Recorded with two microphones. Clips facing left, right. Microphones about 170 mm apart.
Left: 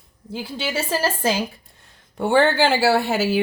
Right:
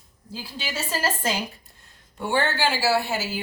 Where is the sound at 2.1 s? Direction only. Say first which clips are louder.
Left 8 dB; 60° left (ahead or behind).